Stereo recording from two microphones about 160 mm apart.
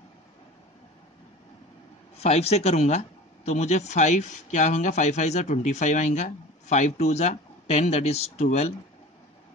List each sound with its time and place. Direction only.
2.1 s speech: 40° left (ahead or behind)